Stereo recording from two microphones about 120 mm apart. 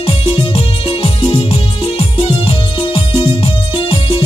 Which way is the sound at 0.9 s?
50° left (ahead or behind).